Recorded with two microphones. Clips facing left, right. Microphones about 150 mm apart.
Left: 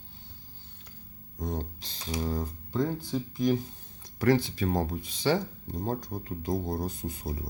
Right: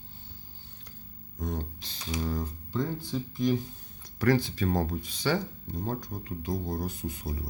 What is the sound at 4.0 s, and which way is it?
Speech, 25° left (ahead or behind).